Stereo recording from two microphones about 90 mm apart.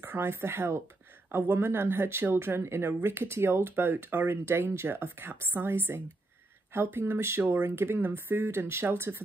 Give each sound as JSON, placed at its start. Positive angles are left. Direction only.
{"t": 0.0, "sound": "speech", "side_deg": -25}